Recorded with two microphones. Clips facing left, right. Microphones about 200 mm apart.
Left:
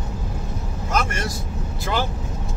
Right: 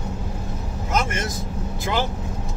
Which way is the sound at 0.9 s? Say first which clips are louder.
Even; 20° right (ahead or behind).